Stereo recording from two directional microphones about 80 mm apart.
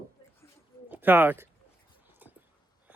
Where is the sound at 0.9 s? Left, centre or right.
Right.